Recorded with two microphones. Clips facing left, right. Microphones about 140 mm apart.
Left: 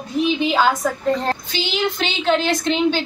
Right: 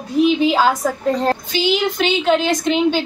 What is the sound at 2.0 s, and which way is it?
A woman's voice, 10° right (ahead or behind).